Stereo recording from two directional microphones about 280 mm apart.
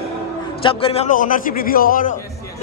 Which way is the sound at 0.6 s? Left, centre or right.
Centre.